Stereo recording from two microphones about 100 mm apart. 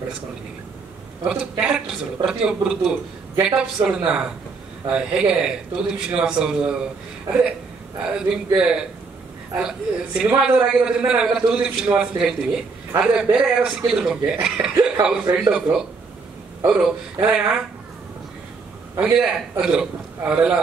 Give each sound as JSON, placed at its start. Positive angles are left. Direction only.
{"t": 1.6, "sound": "a man's voice", "side_deg": -5}
{"t": 8.0, "sound": "a man's voice", "side_deg": -10}
{"t": 18.9, "sound": "a man's voice", "side_deg": -10}